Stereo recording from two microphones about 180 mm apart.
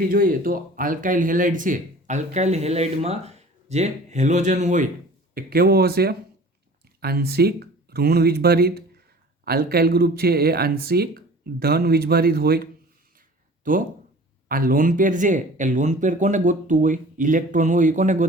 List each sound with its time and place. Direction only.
0.0 s speech: 50° right (ahead or behind)
5.3 s speech: 55° right (ahead or behind)
13.7 s speech: 50° right (ahead or behind)